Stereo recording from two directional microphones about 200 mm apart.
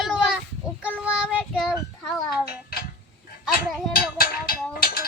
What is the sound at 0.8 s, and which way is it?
A child's voice, 5° right (ahead or behind).